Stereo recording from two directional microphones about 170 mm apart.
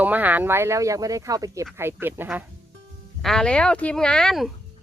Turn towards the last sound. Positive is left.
turn(degrees=0)  # may be behind; listen again after turning